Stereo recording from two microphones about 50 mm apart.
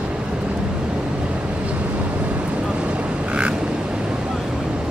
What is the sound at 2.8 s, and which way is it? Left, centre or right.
Vehicle, right.